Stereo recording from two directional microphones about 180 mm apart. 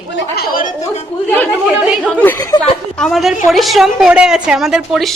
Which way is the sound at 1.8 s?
5° right (ahead or behind).